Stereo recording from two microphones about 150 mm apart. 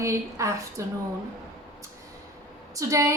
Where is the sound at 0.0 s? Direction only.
20° right (ahead or behind).